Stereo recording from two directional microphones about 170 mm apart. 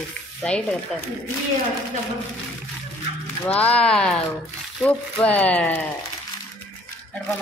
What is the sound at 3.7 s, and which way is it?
Speech, 5° left (ahead or behind).